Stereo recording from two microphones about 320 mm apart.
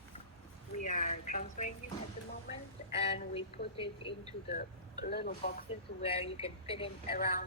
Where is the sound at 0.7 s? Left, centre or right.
Left.